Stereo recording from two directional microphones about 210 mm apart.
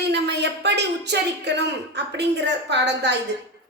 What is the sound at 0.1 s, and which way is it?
A woman's voice, 55° right (ahead or behind).